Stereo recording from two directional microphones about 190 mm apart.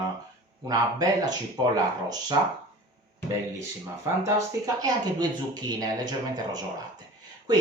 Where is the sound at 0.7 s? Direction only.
20° right (ahead or behind).